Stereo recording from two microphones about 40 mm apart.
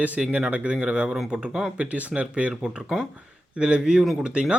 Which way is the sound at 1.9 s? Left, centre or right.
Right.